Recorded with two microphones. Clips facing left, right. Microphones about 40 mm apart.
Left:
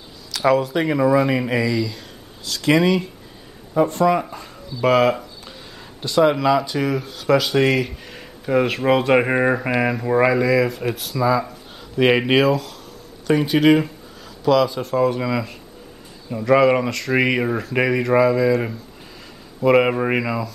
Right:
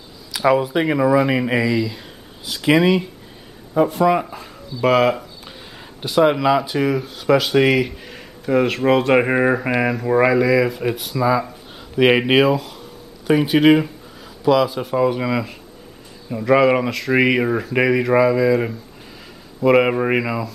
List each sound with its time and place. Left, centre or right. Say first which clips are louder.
0.3 s speech: right 1 dB; centre
5.8 s a sound: right 1 dB; centre
6.1 s speech: right 1 dB; centre